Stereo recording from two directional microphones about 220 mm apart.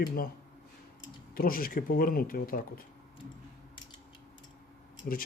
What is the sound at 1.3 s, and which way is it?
Speech, 40° left (ahead or behind).